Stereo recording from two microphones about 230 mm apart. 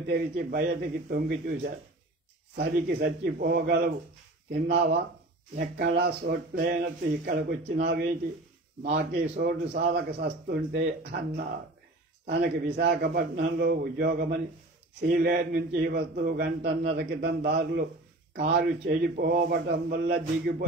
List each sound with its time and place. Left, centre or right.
0.1 s a man's voice: right
9.4 s a man's voice: right